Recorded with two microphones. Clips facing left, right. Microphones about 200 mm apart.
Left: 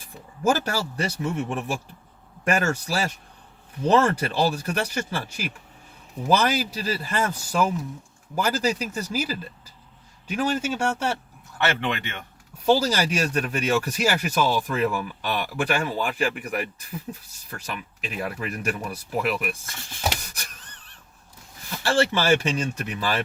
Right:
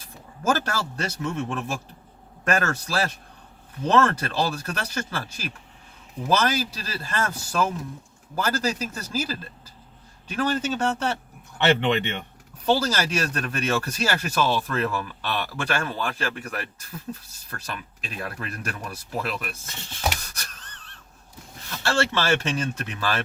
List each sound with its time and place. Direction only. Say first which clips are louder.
0.4 s speech: left 2 dB; 15° left (ahead or behind)
11.5 s speech: right 5 dB; 20° right (ahead or behind)
12.6 s speech: left 2 dB; 10° left (ahead or behind)
20.0 s a sound: even; 15° left (ahead or behind)
21.7 s speech: left 2 dB; 15° left (ahead or behind)